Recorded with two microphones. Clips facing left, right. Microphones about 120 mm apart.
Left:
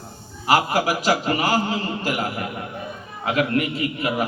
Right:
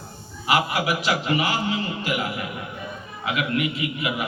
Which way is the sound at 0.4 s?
40° left (ahead or behind).